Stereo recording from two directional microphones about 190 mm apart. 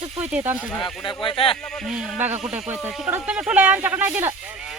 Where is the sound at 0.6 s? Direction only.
Centre (ahead or behind).